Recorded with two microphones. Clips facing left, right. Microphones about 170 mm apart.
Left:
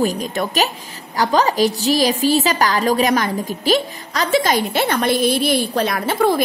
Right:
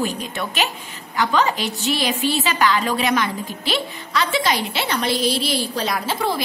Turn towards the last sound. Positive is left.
turn(degrees=50)  # may be behind; listen again after turning